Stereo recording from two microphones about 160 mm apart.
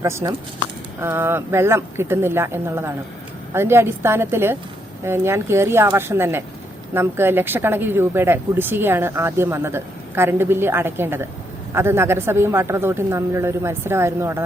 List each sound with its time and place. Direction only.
0.0 s speech: 20° right (ahead or behind)